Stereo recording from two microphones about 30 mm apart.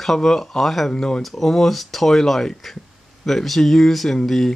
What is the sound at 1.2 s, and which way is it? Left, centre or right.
Speech, centre.